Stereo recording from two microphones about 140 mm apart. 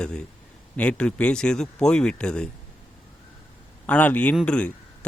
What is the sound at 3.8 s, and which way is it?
Speech, 10° left (ahead or behind).